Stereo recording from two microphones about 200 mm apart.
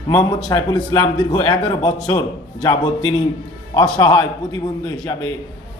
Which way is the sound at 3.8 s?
20° left (ahead or behind).